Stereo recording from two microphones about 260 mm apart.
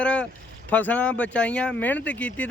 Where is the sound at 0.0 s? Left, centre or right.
Centre.